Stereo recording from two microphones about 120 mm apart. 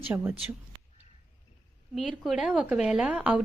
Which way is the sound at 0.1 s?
20° right (ahead or behind).